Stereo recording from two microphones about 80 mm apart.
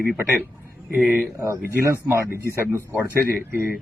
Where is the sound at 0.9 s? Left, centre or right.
Centre.